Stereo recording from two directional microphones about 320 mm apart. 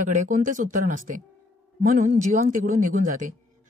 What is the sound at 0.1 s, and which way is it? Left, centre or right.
A woman's voice, right.